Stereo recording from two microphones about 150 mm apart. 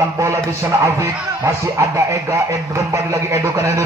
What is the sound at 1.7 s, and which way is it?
Speech, 20° right (ahead or behind).